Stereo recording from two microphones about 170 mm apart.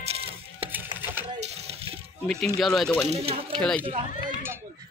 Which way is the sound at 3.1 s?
35° right (ahead or behind).